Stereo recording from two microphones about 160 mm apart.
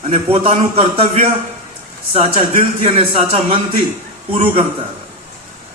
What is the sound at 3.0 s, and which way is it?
Speech, 35° right (ahead or behind).